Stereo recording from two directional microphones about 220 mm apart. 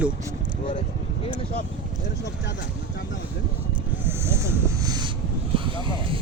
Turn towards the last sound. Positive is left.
turn(degrees=-20)  # may be behind; listen again after turning